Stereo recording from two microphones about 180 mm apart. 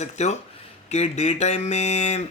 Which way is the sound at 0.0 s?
40° left (ahead or behind).